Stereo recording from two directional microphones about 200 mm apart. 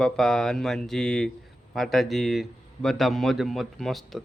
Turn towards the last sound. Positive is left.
turn(degrees=0)  # may be behind; listen again after turning